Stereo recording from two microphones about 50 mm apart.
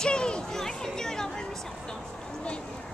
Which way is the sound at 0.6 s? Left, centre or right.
Centre.